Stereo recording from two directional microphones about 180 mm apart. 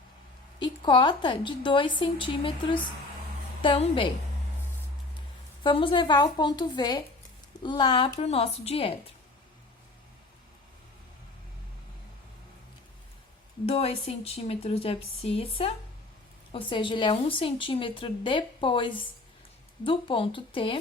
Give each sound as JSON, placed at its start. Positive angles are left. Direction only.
{"t": 0.6, "sound": "a woman's voice", "side_deg": 25}
{"t": 5.6, "sound": "a woman's voice", "side_deg": 25}
{"t": 13.7, "sound": "a woman's voice", "side_deg": 35}